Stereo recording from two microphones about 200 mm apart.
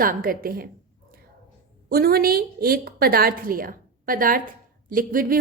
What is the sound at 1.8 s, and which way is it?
Speech, 50° right (ahead or behind).